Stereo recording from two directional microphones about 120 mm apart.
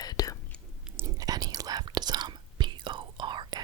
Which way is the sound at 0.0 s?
30° left (ahead or behind).